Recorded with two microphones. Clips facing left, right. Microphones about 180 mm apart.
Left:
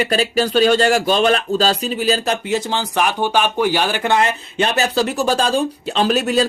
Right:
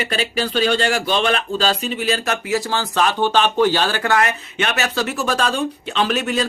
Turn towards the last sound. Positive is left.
turn(degrees=40)  # may be behind; listen again after turning